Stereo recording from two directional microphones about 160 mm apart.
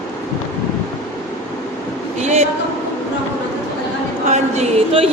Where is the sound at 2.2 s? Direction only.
45° right (ahead or behind).